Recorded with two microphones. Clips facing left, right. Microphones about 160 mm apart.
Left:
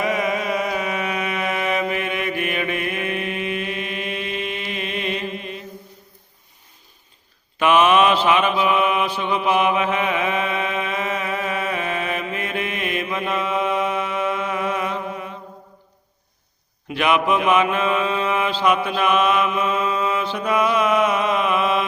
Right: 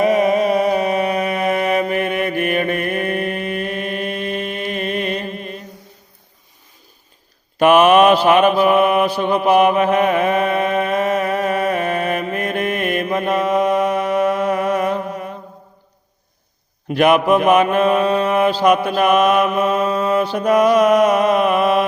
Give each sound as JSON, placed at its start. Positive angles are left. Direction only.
{"t": 0.0, "sound": "mantra", "side_deg": -35}
{"t": 7.6, "sound": "mantra", "side_deg": -50}
{"t": 16.9, "sound": "mantra", "side_deg": -45}